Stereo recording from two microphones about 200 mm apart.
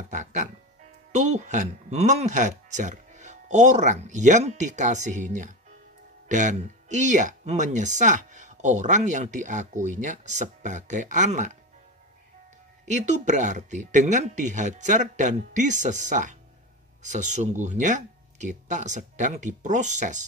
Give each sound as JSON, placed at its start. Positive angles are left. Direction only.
{"t": 0.1, "sound": "speech", "side_deg": -40}
{"t": 12.8, "sound": "speech", "side_deg": -35}